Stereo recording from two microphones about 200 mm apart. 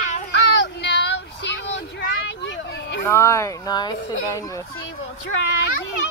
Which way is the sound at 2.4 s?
65° left (ahead or behind).